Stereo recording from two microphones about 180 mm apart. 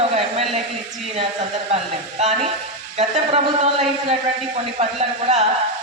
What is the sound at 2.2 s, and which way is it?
A man's voice, 35° right (ahead or behind).